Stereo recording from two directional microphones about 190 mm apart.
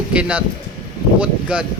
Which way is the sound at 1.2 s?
5° right (ahead or behind).